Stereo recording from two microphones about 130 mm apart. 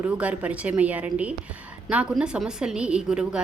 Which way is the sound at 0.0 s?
10° right (ahead or behind).